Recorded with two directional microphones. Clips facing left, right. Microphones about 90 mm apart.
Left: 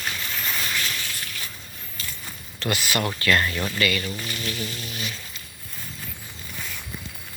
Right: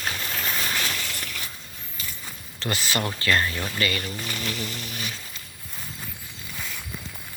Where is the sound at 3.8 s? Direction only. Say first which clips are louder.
Left 2 dB; 35° right (ahead or behind).